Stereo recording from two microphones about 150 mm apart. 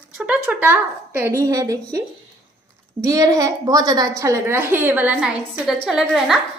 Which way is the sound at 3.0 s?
25° right (ahead or behind).